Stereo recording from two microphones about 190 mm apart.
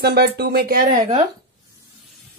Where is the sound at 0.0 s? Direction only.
55° right (ahead or behind).